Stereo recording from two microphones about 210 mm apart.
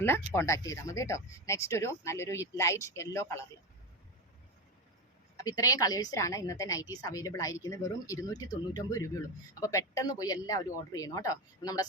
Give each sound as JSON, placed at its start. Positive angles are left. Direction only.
{"t": 0.0, "sound": "a woman's voice", "side_deg": 10}
{"t": 5.4, "sound": "a woman's voice", "side_deg": 15}